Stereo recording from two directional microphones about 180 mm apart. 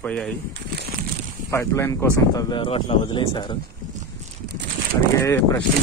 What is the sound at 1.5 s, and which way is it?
Speech, 15° left (ahead or behind).